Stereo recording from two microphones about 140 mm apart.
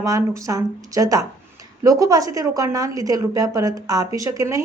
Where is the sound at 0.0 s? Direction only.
25° right (ahead or behind).